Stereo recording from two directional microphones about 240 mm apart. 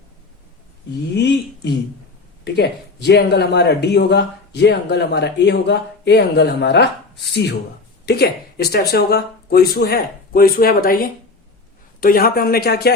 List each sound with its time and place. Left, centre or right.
1.1 s speech: left